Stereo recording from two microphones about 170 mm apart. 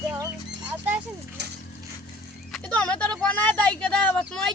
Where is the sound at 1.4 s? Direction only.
80° right.